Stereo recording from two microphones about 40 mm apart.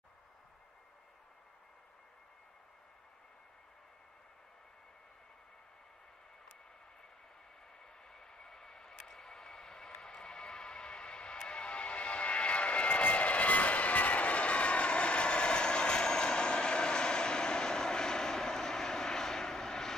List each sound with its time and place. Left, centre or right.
8.1 s vehicle: centre
10.0 s music: centre